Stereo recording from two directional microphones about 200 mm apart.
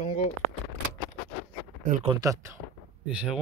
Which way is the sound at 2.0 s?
20° right (ahead or behind).